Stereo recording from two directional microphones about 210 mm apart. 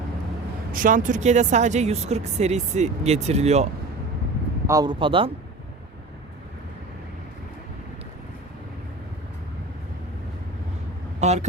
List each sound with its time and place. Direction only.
0.7 s speech: 40° right (ahead or behind)
4.6 s speech: 15° right (ahead or behind)
11.2 s speech: 30° right (ahead or behind)